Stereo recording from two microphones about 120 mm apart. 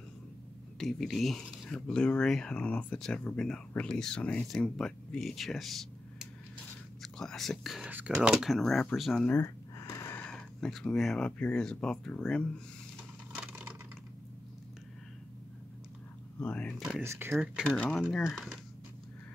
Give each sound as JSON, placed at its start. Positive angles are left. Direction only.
{"t": 0.7, "sound": "speech", "side_deg": 0}
{"t": 9.8, "sound": "snort", "side_deg": 25}
{"t": 10.1, "sound": "speech", "side_deg": 10}
{"t": 13.3, "sound": "vehicle", "side_deg": -10}
{"t": 16.3, "sound": "speech", "side_deg": 10}
{"t": 17.0, "sound": "speech", "side_deg": -20}
{"t": 17.3, "sound": "speech", "side_deg": -5}